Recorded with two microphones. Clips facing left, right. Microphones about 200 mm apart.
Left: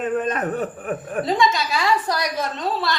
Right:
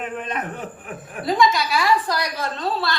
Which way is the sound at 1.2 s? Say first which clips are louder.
Right 2 dB; 25° left (ahead or behind).